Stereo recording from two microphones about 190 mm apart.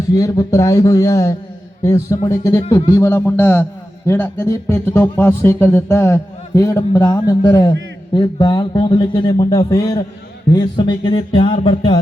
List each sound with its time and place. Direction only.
0.1 s a man's voice: 20° left (ahead or behind)